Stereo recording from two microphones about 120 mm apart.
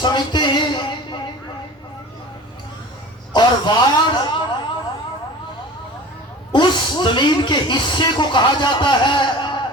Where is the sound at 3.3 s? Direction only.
40° left (ahead or behind).